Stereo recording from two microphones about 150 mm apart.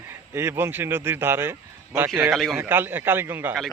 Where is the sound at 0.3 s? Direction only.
15° right (ahead or behind).